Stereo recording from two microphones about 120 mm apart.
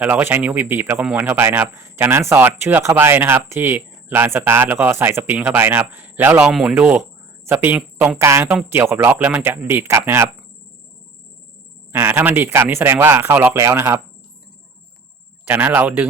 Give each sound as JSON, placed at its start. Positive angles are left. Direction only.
{"t": 0.0, "sound": "speech", "side_deg": -15}
{"t": 11.9, "sound": "speech", "side_deg": -15}
{"t": 15.4, "sound": "speech", "side_deg": -15}